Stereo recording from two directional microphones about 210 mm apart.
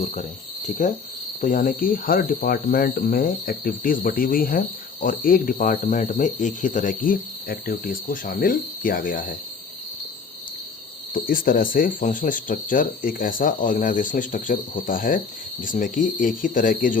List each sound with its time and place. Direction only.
0.0 s speech: 35° left (ahead or behind)
11.1 s speech: 40° left (ahead or behind)